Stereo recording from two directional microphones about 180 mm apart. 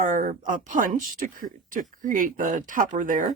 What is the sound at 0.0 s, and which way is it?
Speech, 45° right (ahead or behind).